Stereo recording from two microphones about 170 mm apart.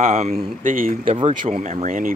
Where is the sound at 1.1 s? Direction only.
35° right (ahead or behind).